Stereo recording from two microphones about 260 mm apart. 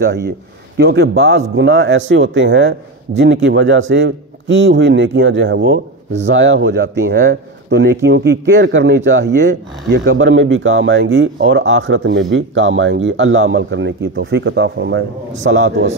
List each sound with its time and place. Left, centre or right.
0.7 s a man's voice: right